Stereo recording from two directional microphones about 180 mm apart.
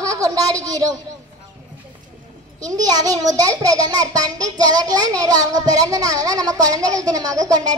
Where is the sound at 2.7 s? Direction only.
20° right (ahead or behind).